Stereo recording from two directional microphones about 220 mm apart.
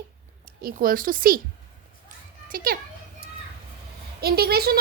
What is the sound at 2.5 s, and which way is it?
Speech, 40° right (ahead or behind).